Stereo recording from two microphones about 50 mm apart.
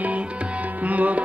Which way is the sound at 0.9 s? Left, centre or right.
Right.